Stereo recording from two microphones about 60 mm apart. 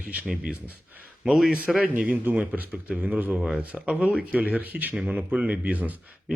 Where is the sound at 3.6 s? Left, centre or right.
Right.